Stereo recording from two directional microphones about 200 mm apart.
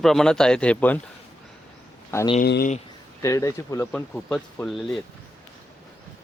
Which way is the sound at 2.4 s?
50° left (ahead or behind).